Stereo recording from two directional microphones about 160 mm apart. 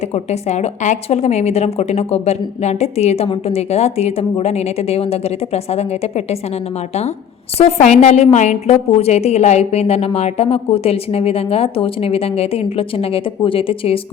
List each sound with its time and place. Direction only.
0.1 s a woman's voice: 45° left (ahead or behind)
7.6 s a woman's voice: 45° left (ahead or behind)